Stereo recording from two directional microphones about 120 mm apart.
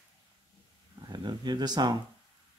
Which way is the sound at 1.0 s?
35° right (ahead or behind).